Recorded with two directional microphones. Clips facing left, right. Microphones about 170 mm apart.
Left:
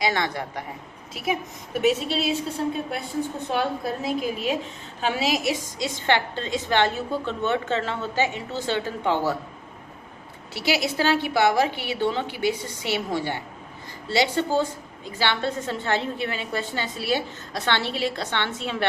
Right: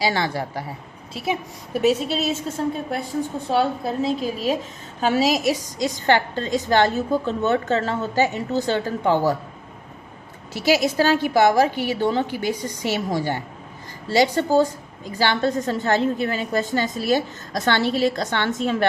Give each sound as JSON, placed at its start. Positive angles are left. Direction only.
{"t": 0.0, "sound": "a woman's voice", "side_deg": -30}
{"t": 3.5, "sound": "a woman's voice", "side_deg": -25}
{"t": 4.9, "sound": "a woman's voice", "side_deg": -40}
{"t": 10.5, "sound": "a woman's voice", "side_deg": -45}